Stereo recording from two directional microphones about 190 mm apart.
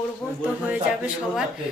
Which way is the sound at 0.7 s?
5° right (ahead or behind).